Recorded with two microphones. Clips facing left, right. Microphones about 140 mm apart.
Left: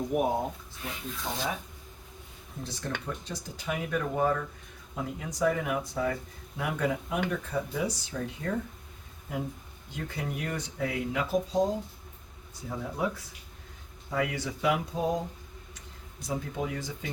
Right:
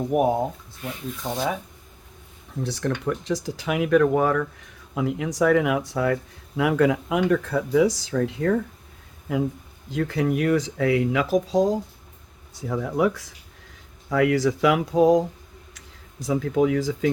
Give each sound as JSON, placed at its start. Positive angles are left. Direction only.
{"t": 1.3, "sound": "speech", "side_deg": -90}
{"t": 2.6, "sound": "speech", "side_deg": -80}
{"t": 3.0, "sound": "speech", "side_deg": -90}
{"t": 12.6, "sound": "speech", "side_deg": -80}
{"t": 16.2, "sound": "speech", "side_deg": -90}